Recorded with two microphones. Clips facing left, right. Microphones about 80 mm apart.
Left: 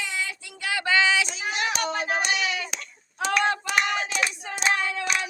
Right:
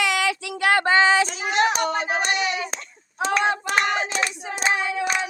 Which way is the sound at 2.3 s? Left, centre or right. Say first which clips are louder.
Right 3 dB; right.